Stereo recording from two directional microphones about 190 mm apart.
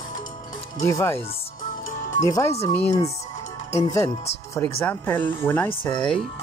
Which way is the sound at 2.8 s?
35° left (ahead or behind).